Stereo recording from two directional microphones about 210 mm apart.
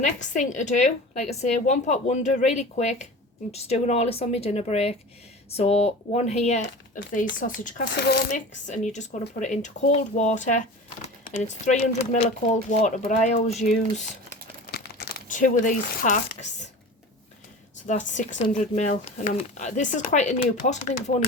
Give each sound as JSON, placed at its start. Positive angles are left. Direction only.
{"t": 0.0, "sound": "a woman's voice", "side_deg": 35}
{"t": 8.3, "sound": "a woman's voice", "side_deg": 35}
{"t": 14.7, "sound": "crumpling", "side_deg": 50}
{"t": 17.8, "sound": "a woman's voice", "side_deg": 35}